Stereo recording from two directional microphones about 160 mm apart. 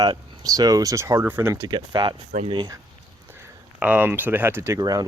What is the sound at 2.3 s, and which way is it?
Speech, 40° right (ahead or behind).